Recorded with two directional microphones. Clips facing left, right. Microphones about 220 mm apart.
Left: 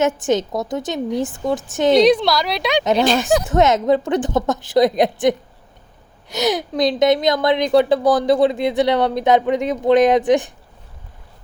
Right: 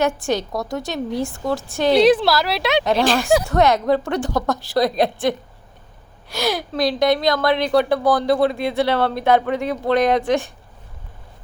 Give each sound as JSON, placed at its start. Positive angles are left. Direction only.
{"t": 0.2, "sound": "speech", "side_deg": 20}
{"t": 2.0, "sound": "speech", "side_deg": -5}
{"t": 3.4, "sound": "speech", "side_deg": 20}